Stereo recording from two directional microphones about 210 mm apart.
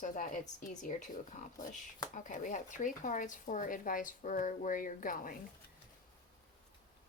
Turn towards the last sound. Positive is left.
turn(degrees=40)  # may be behind; listen again after turning